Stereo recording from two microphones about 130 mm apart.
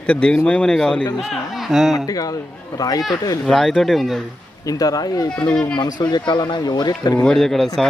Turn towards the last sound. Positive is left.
turn(degrees=0)  # may be behind; listen again after turning